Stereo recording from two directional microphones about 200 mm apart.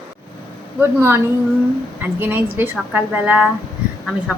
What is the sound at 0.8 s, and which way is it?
A woman's voice, 10° right (ahead or behind).